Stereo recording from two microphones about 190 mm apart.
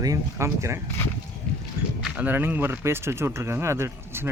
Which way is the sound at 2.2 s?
10° right (ahead or behind).